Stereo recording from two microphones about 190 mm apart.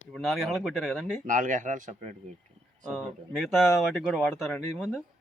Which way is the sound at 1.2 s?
45° right (ahead or behind).